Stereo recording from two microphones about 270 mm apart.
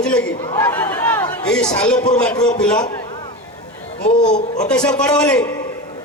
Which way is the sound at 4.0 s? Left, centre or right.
Left.